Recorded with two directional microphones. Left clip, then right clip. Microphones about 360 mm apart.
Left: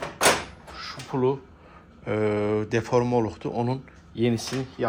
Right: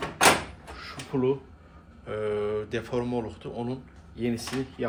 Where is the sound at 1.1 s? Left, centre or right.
Centre.